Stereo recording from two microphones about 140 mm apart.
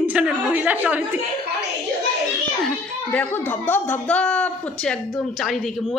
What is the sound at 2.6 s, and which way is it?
A woman's voice, 10° left (ahead or behind).